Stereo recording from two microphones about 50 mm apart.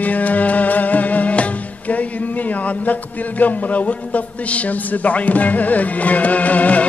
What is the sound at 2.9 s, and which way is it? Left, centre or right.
Music, left.